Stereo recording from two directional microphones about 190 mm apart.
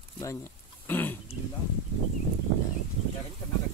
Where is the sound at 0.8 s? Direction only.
10° left (ahead or behind).